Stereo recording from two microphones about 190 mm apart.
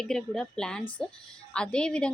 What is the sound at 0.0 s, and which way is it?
A woman's voice, 5° left (ahead or behind).